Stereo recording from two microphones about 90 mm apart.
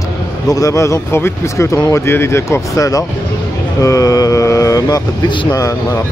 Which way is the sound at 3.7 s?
40° left (ahead or behind).